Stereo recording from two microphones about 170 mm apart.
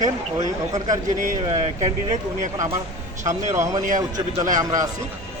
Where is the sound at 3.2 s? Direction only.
45° right (ahead or behind).